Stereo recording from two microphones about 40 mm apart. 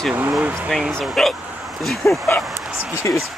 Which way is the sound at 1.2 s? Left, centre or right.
Centre.